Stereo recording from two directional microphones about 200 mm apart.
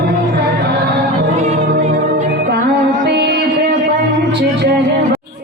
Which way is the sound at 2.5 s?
50° right (ahead or behind).